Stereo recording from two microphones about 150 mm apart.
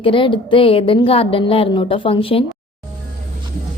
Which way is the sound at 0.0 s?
35° left (ahead or behind).